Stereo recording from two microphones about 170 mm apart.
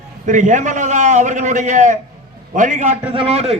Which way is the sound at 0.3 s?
50° right (ahead or behind).